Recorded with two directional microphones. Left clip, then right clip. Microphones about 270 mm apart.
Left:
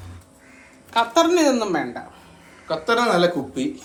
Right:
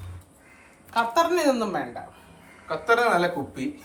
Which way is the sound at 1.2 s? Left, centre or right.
Left.